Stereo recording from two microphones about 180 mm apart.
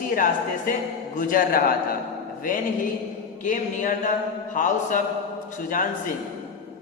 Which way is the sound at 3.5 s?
45° left (ahead or behind).